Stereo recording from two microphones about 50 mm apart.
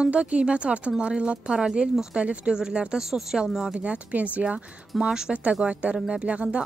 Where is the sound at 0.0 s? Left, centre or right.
Right; by 3.4 s centre.